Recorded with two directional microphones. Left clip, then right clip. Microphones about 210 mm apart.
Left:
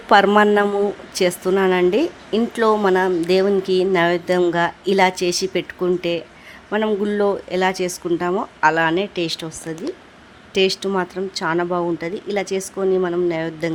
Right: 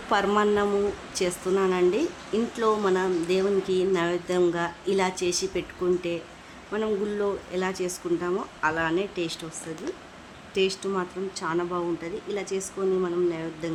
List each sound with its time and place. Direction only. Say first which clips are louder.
0.1 s speech: left 10 dB; 30° left (ahead or behind)
10.5 s speech: left 7 dB; 30° left (ahead or behind)